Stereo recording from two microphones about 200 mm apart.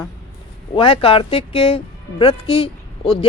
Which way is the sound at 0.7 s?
25° left (ahead or behind).